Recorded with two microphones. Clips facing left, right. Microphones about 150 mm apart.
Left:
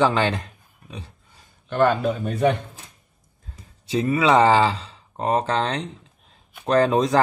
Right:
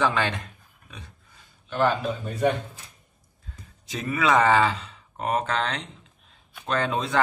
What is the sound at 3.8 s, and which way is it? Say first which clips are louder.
Speech: left 6 dB; 30° left (ahead or behind).